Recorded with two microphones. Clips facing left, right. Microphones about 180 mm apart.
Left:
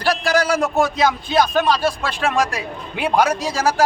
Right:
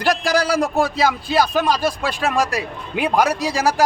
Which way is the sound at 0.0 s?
15° right (ahead or behind).